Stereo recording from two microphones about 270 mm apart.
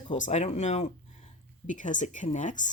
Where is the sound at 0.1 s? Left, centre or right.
Left.